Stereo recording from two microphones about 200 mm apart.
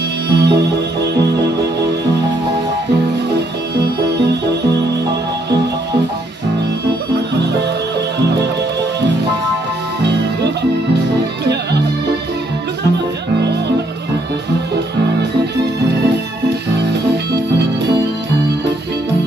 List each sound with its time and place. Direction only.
0.3 s music: 55° right (ahead or behind)